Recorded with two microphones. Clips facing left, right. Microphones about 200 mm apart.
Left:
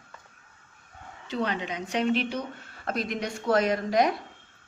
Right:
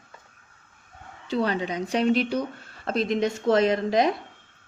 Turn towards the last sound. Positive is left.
turn(degrees=-25)  # may be behind; listen again after turning